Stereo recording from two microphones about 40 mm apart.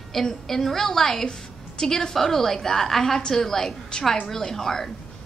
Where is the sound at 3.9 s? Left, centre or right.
Left.